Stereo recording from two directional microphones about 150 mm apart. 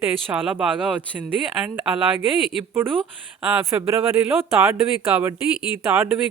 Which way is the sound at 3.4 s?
15° right (ahead or behind).